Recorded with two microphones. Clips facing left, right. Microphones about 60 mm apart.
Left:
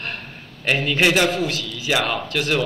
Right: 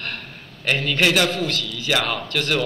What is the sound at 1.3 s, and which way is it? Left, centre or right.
A man's voice, centre.